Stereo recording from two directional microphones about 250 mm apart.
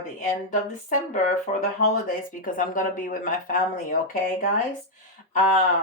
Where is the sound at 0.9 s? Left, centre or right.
Left.